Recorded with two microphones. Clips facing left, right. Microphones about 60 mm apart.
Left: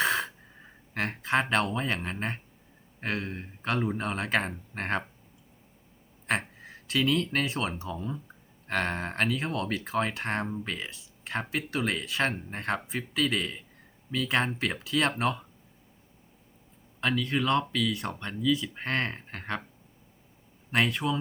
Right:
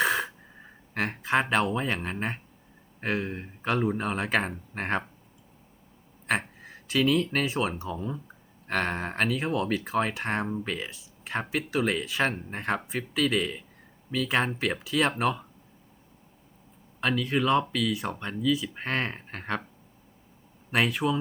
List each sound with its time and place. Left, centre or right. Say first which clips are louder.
0.0 s gasp: right 2 dB; centre
3.0 s speech: right 3 dB; centre
6.2 s speech: right 2 dB; centre
17.0 s speech: right 2 dB; centre
20.7 s speech: right 1 dB; centre